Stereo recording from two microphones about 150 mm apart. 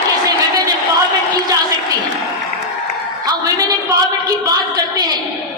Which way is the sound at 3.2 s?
25° right (ahead or behind).